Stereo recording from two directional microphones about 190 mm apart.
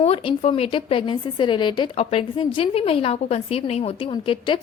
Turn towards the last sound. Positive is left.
turn(degrees=25)  # may be behind; listen again after turning